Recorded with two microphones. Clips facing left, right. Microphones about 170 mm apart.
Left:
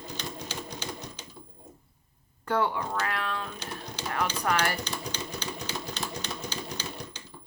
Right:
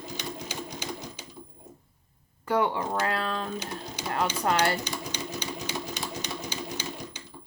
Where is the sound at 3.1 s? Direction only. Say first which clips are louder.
Right 3 dB; 35° right (ahead or behind).